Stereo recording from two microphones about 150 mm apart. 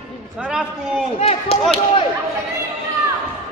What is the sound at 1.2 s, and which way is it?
Speech, 40° left (ahead or behind).